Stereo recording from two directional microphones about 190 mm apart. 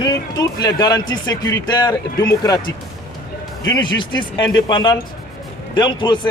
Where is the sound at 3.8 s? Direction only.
25° left (ahead or behind).